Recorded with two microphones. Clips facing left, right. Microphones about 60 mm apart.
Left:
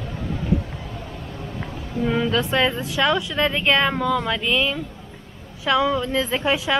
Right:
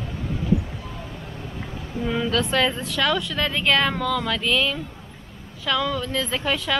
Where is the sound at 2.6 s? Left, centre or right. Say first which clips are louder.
Left 2 dB; centre.